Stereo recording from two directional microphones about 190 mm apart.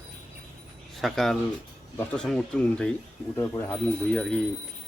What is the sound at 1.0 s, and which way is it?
Speech, centre (ahead or behind).